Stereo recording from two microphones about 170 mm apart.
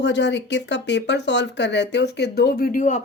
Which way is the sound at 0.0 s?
90° left.